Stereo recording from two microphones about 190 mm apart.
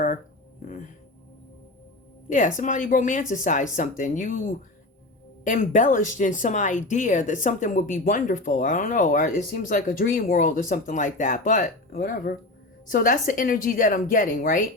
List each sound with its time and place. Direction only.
2.3 s speech: 45° left (ahead or behind)